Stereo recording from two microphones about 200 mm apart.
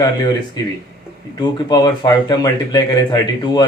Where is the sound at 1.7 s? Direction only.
20° left (ahead or behind).